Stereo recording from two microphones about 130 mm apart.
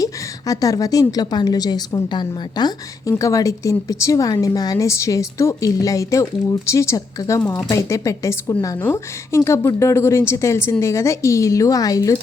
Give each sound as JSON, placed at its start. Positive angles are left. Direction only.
{"t": 0.0, "sound": "a woman's voice", "side_deg": 25}
{"t": 7.4, "sound": "speech", "side_deg": 5}
{"t": 7.7, "sound": "a woman's voice", "side_deg": 25}